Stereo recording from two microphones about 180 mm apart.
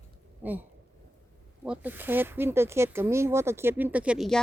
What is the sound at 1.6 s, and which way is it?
Speech, 10° right (ahead or behind).